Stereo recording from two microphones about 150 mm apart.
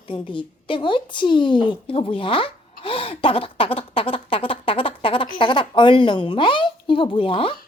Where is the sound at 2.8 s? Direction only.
35° left (ahead or behind).